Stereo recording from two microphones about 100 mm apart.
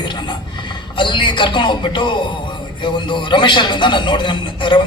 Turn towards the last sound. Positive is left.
turn(degrees=55)  # may be behind; listen again after turning